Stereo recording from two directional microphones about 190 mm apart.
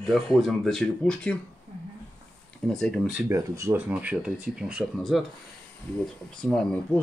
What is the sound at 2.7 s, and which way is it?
Speech, centre (ahead or behind).